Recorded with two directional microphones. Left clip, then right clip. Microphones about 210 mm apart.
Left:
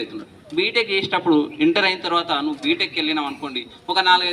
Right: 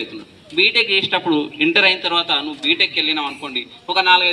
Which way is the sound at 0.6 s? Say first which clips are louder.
Right 5 dB; 15° right (ahead or behind).